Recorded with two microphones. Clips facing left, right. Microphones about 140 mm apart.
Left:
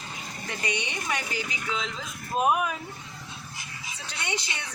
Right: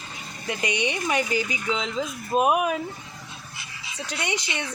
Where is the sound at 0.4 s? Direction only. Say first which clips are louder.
Right 6 dB; 20° right (ahead or behind).